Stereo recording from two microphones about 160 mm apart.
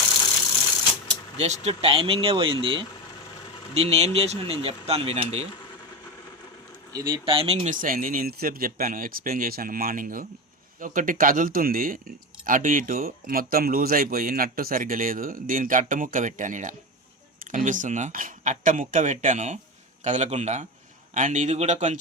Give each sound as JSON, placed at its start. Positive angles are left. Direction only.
{"t": 1.6, "sound": "speech", "side_deg": -35}
{"t": 6.9, "sound": "speech", "side_deg": -30}